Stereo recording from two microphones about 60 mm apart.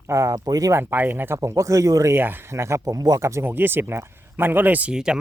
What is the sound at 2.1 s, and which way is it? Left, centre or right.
Speech, right.